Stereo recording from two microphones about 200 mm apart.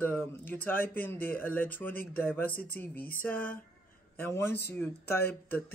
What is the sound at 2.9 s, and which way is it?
Speech, 45° left (ahead or behind).